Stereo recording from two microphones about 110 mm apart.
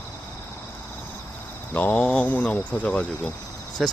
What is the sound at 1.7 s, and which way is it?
Speech, 15° left (ahead or behind).